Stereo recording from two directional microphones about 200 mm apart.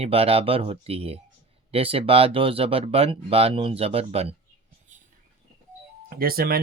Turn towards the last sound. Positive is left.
turn(degrees=-50)  # may be behind; listen again after turning